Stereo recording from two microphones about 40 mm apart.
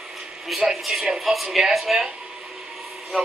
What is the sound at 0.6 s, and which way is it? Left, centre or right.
Speech, centre.